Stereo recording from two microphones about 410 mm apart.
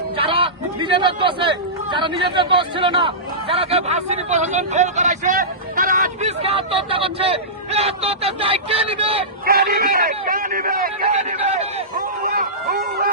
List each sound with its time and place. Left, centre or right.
0.2 s speech: centre